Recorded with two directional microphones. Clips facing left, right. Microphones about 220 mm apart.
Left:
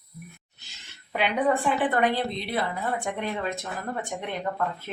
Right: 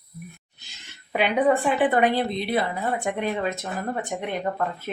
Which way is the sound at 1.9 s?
10° right (ahead or behind).